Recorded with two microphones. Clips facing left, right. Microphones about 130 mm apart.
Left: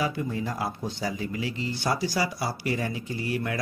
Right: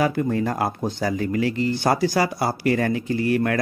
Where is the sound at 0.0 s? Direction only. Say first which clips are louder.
Right 7 dB; 60° right (ahead or behind).